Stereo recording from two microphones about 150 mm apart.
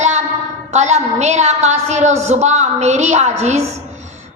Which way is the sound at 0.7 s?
50° right (ahead or behind).